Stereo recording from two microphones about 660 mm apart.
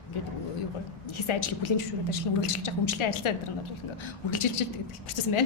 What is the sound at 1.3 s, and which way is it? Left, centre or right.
A woman's voice, left.